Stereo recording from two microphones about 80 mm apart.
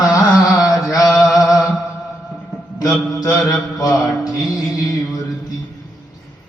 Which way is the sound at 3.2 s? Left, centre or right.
Centre.